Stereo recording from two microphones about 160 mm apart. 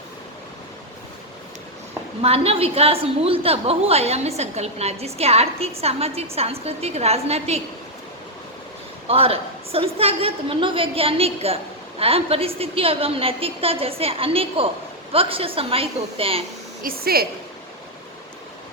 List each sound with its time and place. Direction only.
2.2 s a woman's voice: 40° right (ahead or behind)
9.0 s a woman's voice: 40° right (ahead or behind)
16.8 s speech: 70° right (ahead or behind)